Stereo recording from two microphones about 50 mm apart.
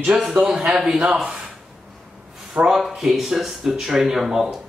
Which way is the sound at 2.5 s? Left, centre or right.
Centre.